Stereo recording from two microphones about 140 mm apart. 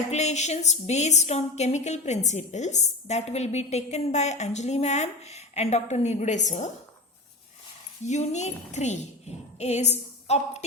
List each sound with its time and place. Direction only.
0.1 s a woman's voice: 55° left (ahead or behind)
8.0 s a woman's voice: 55° left (ahead or behind)